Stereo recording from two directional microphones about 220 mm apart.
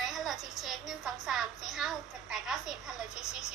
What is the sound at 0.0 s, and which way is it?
A woman's voice, centre (ahead or behind).